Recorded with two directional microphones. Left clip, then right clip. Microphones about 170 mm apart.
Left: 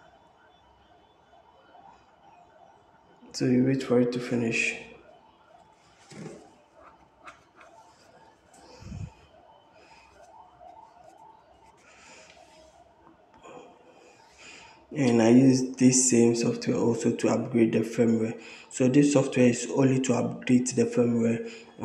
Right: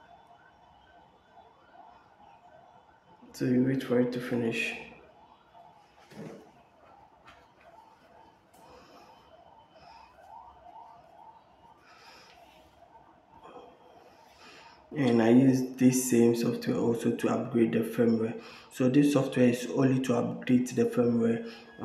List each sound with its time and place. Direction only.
3.3 s speech: 15° left (ahead or behind)
13.4 s a sound: 5° left (ahead or behind)
14.4 s speech: 5° left (ahead or behind)